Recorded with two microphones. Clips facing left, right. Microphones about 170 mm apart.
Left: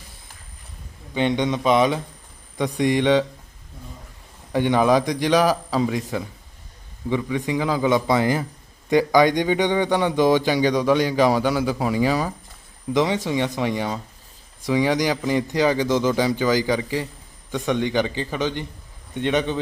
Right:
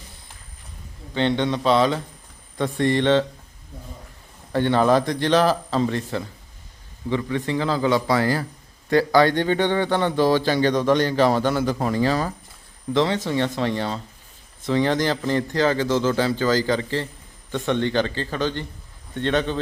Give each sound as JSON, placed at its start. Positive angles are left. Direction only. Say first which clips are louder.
{"t": 1.1, "sound": "a man's voice", "louder": "even", "side_deg": 15}
{"t": 4.5, "sound": "a man's voice", "louder": "even", "side_deg": 15}